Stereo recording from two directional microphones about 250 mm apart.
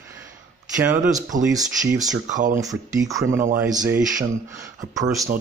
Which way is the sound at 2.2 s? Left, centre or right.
Right.